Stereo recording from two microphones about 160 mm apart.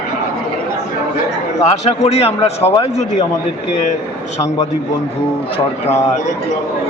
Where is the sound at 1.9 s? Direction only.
40° left (ahead or behind).